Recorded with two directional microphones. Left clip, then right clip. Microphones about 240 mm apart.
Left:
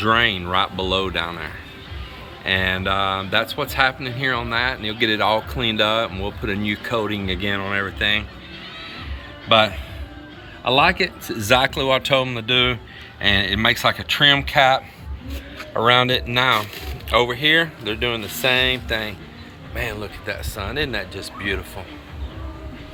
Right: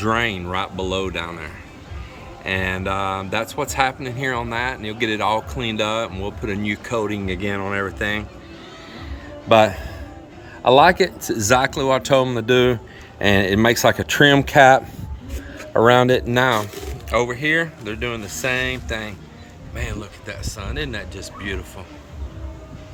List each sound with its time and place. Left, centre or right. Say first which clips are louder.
0.0 s speech: left 3 dB; centre
9.5 s a man's voice: right 2 dB; right
11.4 s speech: even; centre
17.1 s speech: left 2 dB; centre